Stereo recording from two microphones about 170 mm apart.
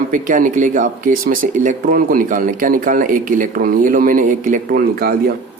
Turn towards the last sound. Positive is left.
turn(degrees=-60)  # may be behind; listen again after turning